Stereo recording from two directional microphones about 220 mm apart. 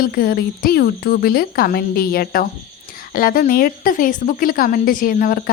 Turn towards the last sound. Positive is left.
turn(degrees=40)  # may be behind; listen again after turning